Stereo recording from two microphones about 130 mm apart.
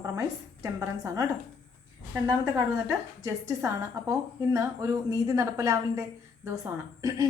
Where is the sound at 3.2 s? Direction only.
25° right (ahead or behind).